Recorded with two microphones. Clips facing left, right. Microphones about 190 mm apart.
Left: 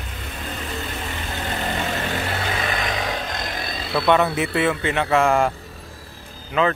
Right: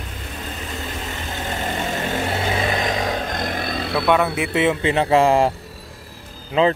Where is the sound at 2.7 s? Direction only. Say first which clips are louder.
Right 3 dB; 35° right (ahead or behind); by 3.9 s 55° right (ahead or behind).